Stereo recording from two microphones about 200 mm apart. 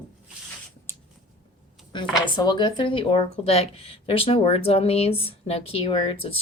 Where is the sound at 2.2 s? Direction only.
20° left (ahead or behind).